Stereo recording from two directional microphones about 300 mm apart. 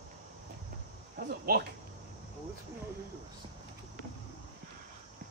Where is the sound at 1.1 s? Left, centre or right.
Right.